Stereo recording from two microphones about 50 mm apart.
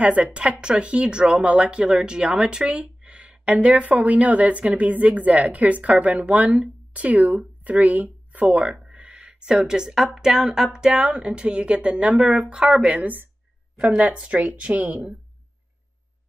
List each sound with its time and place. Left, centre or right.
0.0 s speech: right
12.8 s speech: right